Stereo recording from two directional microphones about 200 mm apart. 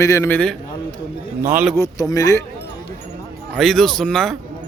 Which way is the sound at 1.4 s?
10° right (ahead or behind).